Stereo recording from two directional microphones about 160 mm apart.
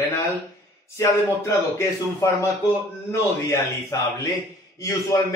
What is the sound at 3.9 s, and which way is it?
Speech, 20° left (ahead or behind).